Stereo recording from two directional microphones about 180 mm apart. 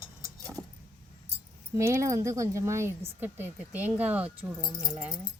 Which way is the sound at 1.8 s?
15° right (ahead or behind).